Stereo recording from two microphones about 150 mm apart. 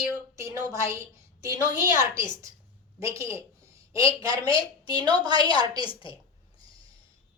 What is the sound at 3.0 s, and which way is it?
A woman's voice, 20° right (ahead or behind).